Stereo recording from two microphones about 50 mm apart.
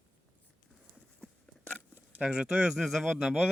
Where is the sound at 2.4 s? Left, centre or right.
Centre.